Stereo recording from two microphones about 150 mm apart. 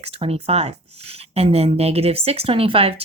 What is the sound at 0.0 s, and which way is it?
Speech, 40° right (ahead or behind).